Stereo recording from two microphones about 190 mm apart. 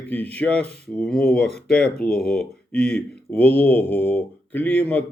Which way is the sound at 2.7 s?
5° left (ahead or behind).